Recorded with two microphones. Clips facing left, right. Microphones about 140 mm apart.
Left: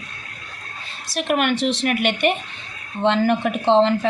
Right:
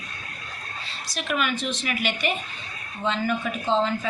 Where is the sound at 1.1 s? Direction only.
60° left (ahead or behind).